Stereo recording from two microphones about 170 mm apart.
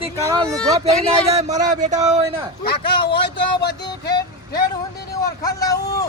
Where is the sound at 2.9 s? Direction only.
30° left (ahead or behind).